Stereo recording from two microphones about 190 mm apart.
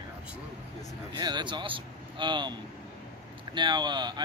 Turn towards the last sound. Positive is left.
turn(degrees=-20)  # may be behind; listen again after turning